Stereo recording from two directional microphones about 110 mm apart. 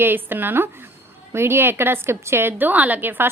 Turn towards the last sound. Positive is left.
turn(degrees=-15)  # may be behind; listen again after turning